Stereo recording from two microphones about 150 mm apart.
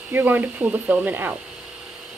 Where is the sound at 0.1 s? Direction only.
10° right (ahead or behind).